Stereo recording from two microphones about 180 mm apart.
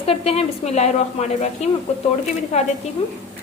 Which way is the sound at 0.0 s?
35° left (ahead or behind).